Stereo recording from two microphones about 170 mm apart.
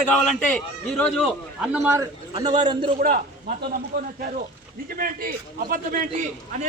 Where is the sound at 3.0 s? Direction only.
60° right (ahead or behind).